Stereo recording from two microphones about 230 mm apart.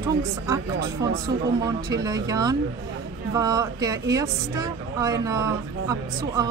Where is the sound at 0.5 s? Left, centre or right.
Centre.